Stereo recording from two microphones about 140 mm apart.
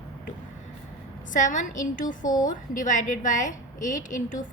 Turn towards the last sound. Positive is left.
turn(degrees=70)  # may be behind; listen again after turning